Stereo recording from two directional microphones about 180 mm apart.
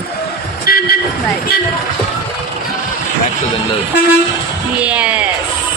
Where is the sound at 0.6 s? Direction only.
55° left (ahead or behind).